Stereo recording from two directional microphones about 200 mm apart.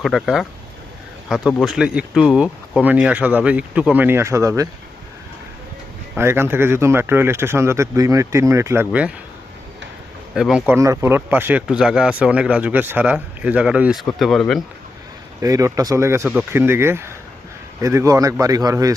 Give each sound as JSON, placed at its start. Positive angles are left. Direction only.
{"t": 0.0, "sound": "speech", "side_deg": 0}
{"t": 6.1, "sound": "speech", "side_deg": -10}
{"t": 10.3, "sound": "speech", "side_deg": -5}
{"t": 10.8, "sound": "speech", "side_deg": -15}
{"t": 15.4, "sound": "speech", "side_deg": -15}